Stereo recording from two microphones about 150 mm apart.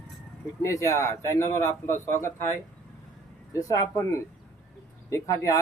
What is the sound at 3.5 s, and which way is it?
Speech, 25° left (ahead or behind).